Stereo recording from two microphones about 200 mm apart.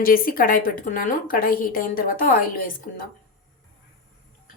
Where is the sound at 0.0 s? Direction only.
45° left (ahead or behind).